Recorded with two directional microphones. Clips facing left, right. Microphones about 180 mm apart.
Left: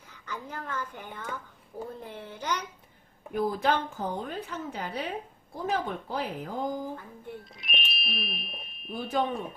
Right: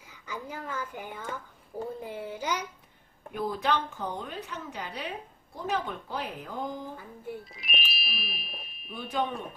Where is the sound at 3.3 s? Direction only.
45° left (ahead or behind).